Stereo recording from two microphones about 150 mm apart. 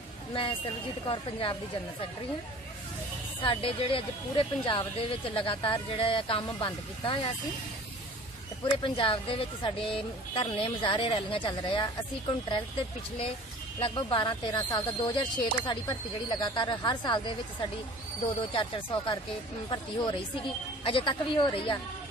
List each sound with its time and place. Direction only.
0.3 s a woman's voice: 35° left (ahead or behind)
3.4 s speech: 35° left (ahead or behind)
8.8 s speech: 35° left (ahead or behind)
13.7 s speech: 35° left (ahead or behind)